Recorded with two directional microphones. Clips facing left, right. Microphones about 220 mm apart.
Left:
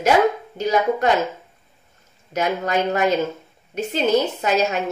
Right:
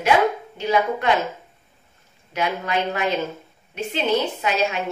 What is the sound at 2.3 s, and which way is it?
A woman's voice, 45° left (ahead or behind).